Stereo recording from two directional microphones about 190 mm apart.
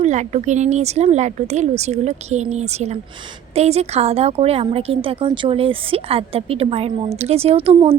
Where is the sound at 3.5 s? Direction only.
35° right (ahead or behind).